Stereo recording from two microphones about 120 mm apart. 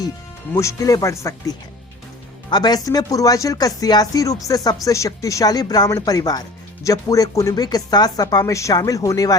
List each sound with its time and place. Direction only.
0.5 s speech: 25° left (ahead or behind)